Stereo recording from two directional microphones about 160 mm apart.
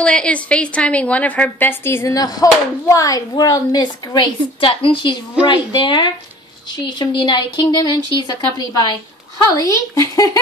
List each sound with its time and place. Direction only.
0.0 s a woman's voice: 5° left (ahead or behind)